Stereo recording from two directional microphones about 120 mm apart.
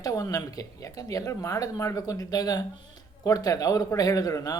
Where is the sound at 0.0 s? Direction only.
30° left (ahead or behind).